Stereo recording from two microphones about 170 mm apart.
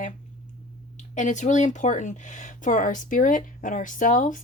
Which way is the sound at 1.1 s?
45° left (ahead or behind).